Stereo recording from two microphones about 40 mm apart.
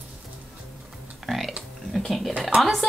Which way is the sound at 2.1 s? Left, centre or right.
Centre.